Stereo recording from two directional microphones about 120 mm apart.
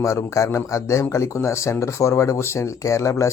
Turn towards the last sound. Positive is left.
turn(degrees=25)  # may be behind; listen again after turning